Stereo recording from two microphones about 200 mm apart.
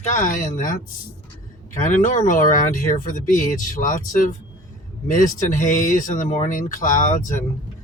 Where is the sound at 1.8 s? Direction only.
40° left (ahead or behind).